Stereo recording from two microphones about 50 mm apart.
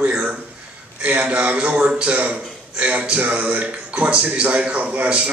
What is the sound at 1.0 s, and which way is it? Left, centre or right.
A man's voice, right.